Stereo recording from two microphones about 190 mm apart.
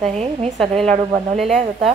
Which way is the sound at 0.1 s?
35° right (ahead or behind).